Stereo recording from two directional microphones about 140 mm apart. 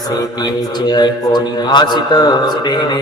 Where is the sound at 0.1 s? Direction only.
30° left (ahead or behind).